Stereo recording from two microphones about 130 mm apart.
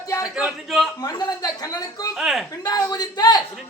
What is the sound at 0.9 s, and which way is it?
Speech, 30° left (ahead or behind).